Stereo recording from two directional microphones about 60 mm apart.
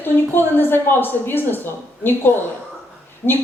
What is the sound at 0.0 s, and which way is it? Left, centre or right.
A woman's voice, left.